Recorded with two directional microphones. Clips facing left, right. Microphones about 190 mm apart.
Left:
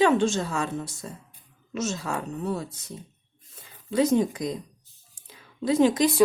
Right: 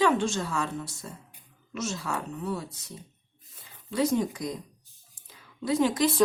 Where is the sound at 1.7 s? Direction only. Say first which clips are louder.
Left 4 dB; 20° left (ahead or behind).